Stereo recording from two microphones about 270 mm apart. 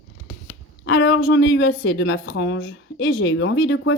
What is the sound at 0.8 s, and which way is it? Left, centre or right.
A woman's voice, left.